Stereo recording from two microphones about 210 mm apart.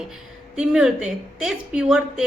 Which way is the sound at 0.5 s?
5° right (ahead or behind).